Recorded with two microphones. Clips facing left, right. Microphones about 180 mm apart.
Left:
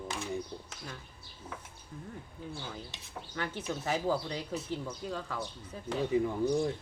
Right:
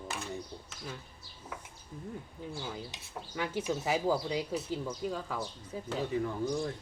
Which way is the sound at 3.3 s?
10° right (ahead or behind).